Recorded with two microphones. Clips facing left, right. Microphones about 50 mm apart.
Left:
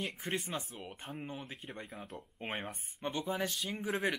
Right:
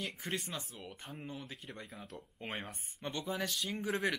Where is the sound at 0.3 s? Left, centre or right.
Left.